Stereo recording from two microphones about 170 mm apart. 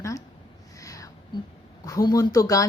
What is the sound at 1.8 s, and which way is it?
Speech, 20° left (ahead or behind).